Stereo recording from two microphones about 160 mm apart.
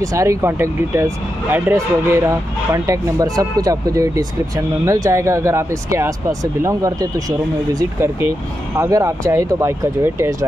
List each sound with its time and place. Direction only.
0.0 s speech: 20° right (ahead or behind)